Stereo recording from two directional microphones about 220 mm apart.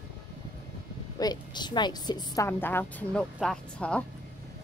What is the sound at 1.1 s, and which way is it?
A woman's voice, 20° left (ahead or behind).